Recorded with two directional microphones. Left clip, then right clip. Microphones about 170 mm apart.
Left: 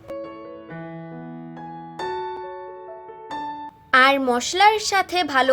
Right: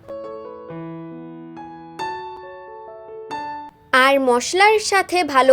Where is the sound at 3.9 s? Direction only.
25° right (ahead or behind).